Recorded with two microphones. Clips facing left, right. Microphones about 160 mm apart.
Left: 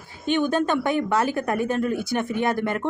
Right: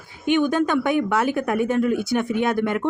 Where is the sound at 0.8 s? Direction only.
15° right (ahead or behind).